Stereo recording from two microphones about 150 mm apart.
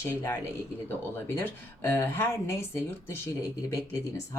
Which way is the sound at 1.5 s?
15° left (ahead or behind).